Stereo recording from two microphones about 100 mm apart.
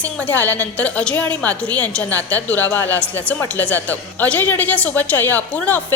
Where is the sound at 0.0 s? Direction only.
15° left (ahead or behind).